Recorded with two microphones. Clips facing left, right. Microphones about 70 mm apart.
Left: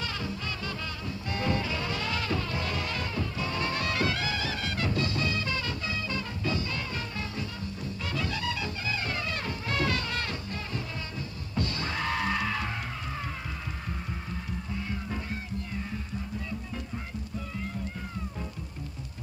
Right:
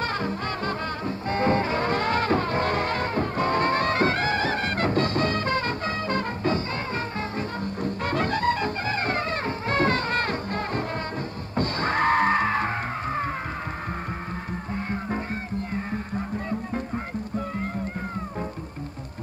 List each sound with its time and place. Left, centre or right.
0.0 s music: right
14.7 s music: right